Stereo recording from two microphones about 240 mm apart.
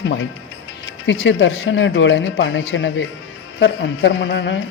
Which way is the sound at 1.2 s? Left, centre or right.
Left.